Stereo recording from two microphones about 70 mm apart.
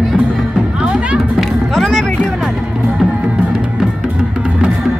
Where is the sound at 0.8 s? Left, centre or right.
Centre.